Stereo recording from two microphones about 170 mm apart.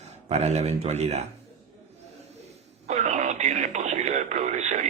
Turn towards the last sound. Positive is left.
turn(degrees=-45)  # may be behind; listen again after turning